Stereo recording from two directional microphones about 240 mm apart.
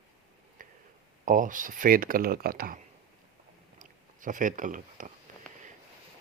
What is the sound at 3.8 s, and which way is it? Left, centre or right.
Speech, right.